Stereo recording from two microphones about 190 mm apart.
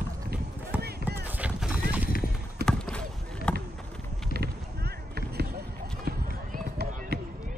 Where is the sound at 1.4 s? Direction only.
5° right (ahead or behind).